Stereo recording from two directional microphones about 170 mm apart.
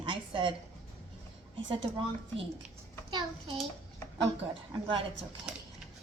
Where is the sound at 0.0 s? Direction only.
30° right (ahead or behind).